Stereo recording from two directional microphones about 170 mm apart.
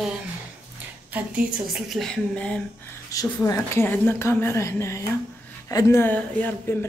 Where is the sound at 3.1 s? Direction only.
20° left (ahead or behind).